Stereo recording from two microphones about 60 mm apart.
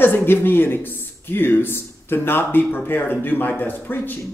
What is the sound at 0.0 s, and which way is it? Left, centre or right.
Speech, left.